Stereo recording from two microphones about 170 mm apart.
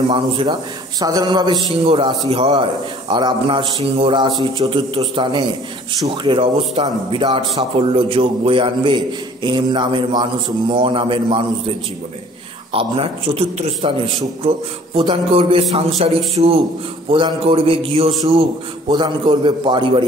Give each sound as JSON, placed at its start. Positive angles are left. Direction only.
{"t": 0.1, "sound": "a man's voice", "side_deg": -30}
{"t": 12.7, "sound": "speech", "side_deg": -35}
{"t": 15.0, "sound": "a man's voice", "side_deg": -35}